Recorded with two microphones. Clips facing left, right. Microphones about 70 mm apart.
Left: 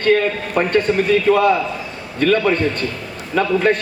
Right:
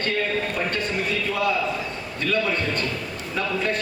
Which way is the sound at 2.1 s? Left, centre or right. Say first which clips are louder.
Left 9 dB; left.